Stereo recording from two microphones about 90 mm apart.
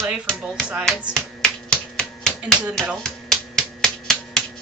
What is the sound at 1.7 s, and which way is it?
Typewriter, 10° left (ahead or behind).